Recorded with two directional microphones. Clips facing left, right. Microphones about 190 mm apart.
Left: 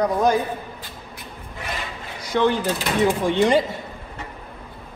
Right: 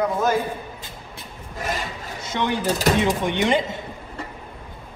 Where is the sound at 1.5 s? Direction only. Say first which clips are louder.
Right 4 dB; 40° right (ahead or behind).